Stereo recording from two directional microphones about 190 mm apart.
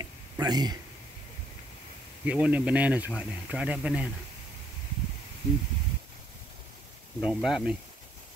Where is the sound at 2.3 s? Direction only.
5° right (ahead or behind).